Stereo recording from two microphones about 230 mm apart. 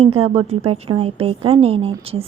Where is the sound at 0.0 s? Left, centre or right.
Right.